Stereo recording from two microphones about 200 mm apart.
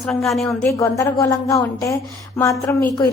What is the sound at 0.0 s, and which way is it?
Speech, centre (ahead or behind).